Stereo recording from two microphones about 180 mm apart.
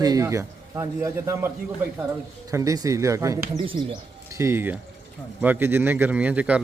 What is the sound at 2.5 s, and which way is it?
A man's voice, 20° right (ahead or behind).